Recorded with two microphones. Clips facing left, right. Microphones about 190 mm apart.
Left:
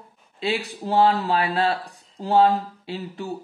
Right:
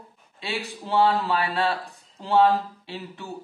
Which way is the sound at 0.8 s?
40° left (ahead or behind).